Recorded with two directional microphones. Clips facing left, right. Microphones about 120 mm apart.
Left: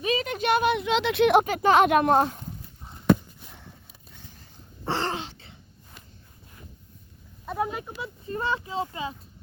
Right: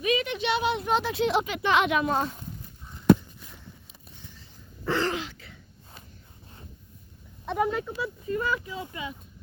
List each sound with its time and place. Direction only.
0.0 s a sound: 35° left (ahead or behind); by 2.3 s 60° left (ahead or behind)
4.9 s throat clearing: 30° left (ahead or behind)
7.4 s speech: 5° left (ahead or behind)
7.9 s speech: 25° left (ahead or behind)